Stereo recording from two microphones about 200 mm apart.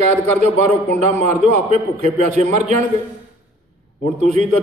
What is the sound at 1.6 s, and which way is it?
A man's voice, 35° right (ahead or behind).